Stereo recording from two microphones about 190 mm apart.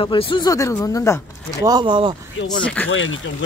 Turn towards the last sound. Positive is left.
turn(degrees=90)